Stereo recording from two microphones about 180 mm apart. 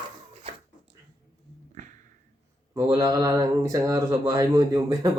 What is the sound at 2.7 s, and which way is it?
Speech, 15° right (ahead or behind).